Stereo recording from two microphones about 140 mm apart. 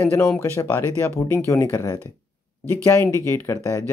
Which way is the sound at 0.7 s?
15° left (ahead or behind).